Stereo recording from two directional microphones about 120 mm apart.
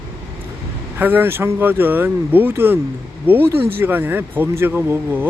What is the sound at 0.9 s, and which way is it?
Speech, 15° right (ahead or behind).